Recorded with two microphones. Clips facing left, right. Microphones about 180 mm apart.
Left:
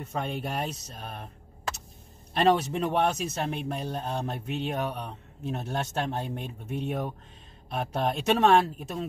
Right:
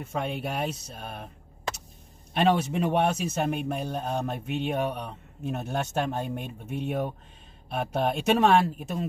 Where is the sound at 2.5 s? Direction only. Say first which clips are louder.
Right 1 dB; 10° right (ahead or behind).